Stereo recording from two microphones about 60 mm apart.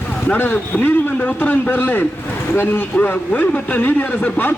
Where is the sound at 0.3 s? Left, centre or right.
Left.